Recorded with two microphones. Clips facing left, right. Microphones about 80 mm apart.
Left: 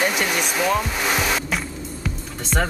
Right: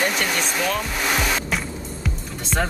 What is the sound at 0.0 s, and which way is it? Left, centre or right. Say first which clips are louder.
Music: left 1 dB; centre.